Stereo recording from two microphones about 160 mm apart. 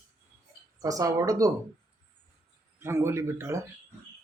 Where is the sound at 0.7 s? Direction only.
20° right (ahead or behind).